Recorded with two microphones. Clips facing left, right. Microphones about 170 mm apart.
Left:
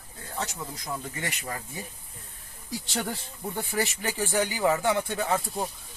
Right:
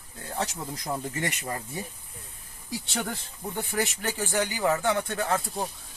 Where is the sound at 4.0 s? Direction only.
10° left (ahead or behind).